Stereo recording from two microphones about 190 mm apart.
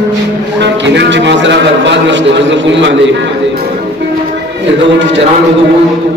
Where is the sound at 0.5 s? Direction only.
70° right (ahead or behind).